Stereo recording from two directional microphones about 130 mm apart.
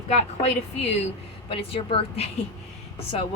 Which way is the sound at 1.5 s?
45° left (ahead or behind).